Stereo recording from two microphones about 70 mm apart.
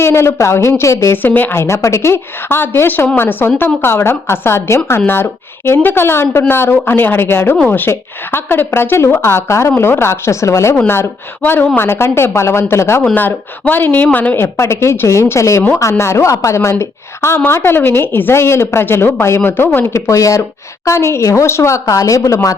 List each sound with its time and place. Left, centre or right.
0.0 s speech: left
1.1 s speech: left
1.6 s a woman's voice: left
10.8 s a woman's voice: left
13.1 s a woman's voice: left
20.1 s speech: left